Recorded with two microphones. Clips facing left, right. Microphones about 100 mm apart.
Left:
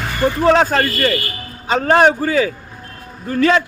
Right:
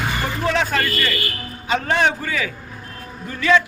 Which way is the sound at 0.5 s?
40° left (ahead or behind).